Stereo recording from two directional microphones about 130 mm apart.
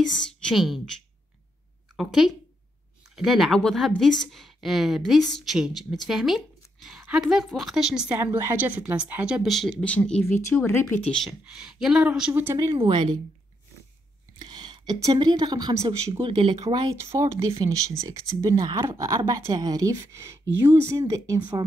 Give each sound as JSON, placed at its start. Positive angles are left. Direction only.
{"t": 0.4, "sound": "a woman's voice", "side_deg": 0}
{"t": 2.0, "sound": "a woman's voice", "side_deg": 0}
{"t": 8.2, "sound": "speech", "side_deg": -20}
{"t": 9.5, "sound": "a woman's voice", "side_deg": 0}
{"t": 11.1, "sound": "speech", "side_deg": -5}
{"t": 12.7, "sound": "speech", "side_deg": -35}
{"t": 14.4, "sound": "a sound", "side_deg": -35}
{"t": 15.0, "sound": "speech", "side_deg": -30}
{"t": 16.3, "sound": "speech", "side_deg": -45}
{"t": 16.5, "sound": "speech", "side_deg": -30}
{"t": 16.9, "sound": "speech", "side_deg": -20}
{"t": 18.5, "sound": "speech", "side_deg": -35}
{"t": 18.9, "sound": "speech", "side_deg": -25}